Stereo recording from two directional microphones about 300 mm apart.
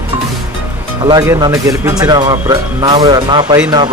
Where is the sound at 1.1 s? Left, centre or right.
Centre.